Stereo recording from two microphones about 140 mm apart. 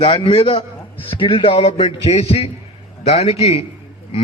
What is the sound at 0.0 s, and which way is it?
A man's voice, 35° left (ahead or behind).